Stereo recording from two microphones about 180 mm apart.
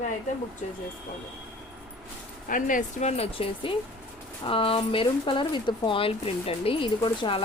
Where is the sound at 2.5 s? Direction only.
50° left (ahead or behind).